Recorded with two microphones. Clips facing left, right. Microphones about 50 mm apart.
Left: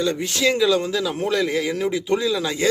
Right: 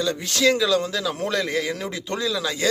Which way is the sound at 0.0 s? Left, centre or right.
Left.